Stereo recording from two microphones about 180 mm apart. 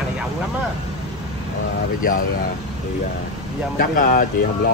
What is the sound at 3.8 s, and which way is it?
Speech, 50° left (ahead or behind).